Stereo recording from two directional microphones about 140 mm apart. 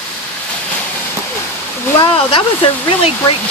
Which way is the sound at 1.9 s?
35° left (ahead or behind).